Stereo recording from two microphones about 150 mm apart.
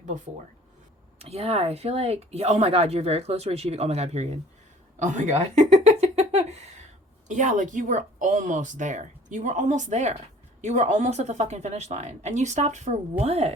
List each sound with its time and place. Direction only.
1.2 s a woman's voice: 45° right (ahead or behind)